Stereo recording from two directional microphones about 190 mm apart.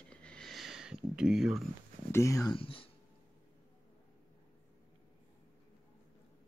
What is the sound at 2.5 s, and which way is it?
Speech, 30° left (ahead or behind).